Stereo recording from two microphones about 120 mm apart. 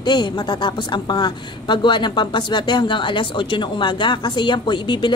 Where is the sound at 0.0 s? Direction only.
40° left (ahead or behind).